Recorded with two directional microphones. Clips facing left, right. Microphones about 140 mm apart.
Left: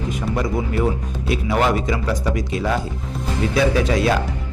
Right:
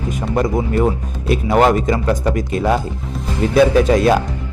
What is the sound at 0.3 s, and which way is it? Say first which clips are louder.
Speech: right 6 dB; 50° right (ahead or behind).